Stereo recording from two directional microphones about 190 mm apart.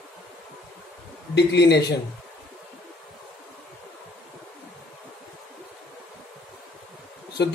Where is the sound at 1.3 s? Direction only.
60° left (ahead or behind).